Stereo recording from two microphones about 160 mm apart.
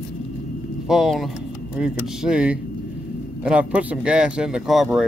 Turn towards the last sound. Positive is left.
turn(degrees=0)  # may be behind; listen again after turning